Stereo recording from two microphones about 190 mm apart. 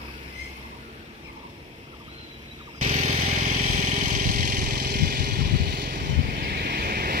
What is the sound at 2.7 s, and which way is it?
Vehicle, 40° right (ahead or behind).